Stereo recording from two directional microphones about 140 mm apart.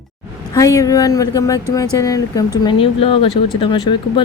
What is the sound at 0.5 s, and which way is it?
Speech, 25° left (ahead or behind).